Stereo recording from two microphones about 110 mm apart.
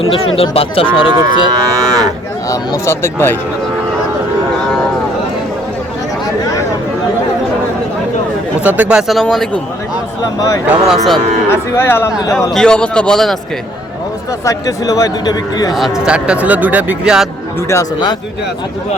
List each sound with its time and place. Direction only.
0.0 s speech: 55° left (ahead or behind)
1.1 s cattle: 35° right (ahead or behind)
2.5 s speech: 25° left (ahead or behind)
8.6 s speech: 15° right (ahead or behind); by 9.6 s 5° left (ahead or behind)
10.8 s speech: centre (ahead or behind)
11.4 s speech: 20° left (ahead or behind)
12.5 s a man's voice: 10° left (ahead or behind)
14.4 s speech: 30° left (ahead or behind)
15.7 s speech: 5° right (ahead or behind)